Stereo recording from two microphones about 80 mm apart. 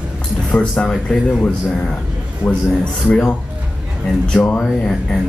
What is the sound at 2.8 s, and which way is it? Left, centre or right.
A man's voice, centre.